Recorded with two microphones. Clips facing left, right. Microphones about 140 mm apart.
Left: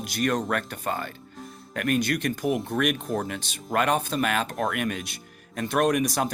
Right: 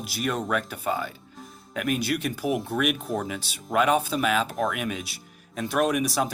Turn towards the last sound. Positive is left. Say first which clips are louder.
# left 1 dB
turn(degrees=0)  # may be behind; listen again after turning